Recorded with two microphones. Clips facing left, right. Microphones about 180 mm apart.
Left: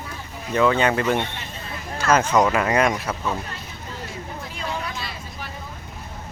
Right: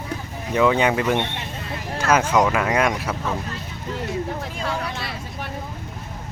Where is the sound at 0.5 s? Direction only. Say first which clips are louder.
Right 1 dB; 15° right (ahead or behind).